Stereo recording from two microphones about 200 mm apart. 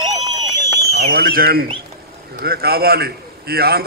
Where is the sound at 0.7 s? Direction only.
50° right (ahead or behind).